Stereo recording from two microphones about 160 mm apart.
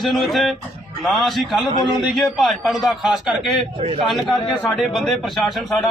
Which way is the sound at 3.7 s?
35° right (ahead or behind).